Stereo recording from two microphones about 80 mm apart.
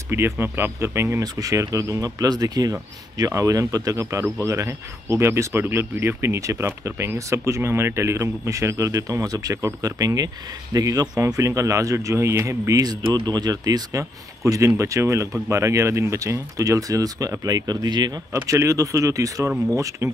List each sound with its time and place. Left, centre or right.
0.1 s speech: right
1.2 s speech: right
18.3 s speech: right